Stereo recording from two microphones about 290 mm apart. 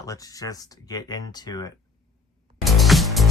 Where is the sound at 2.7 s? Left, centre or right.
Centre.